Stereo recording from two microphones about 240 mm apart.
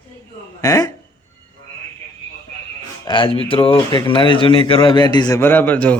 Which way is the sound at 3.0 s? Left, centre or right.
Centre.